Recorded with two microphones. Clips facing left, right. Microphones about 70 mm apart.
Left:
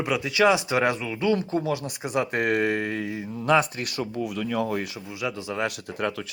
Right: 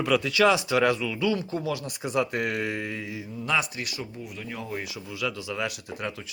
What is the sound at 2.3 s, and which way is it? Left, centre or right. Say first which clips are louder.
Speech: left 5 dB; left.